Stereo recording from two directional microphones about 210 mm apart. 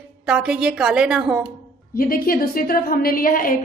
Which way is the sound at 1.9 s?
45° left (ahead or behind).